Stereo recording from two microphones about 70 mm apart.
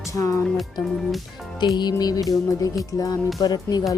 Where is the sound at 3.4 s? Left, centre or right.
Left.